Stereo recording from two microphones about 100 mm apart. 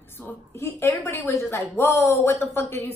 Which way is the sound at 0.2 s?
15° left (ahead or behind).